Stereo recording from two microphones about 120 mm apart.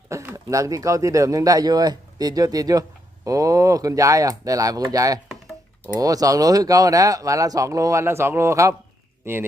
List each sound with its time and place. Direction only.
0.1 s speech: 25° right (ahead or behind)